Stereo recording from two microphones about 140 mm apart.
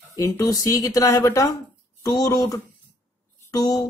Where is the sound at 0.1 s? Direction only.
20° left (ahead or behind).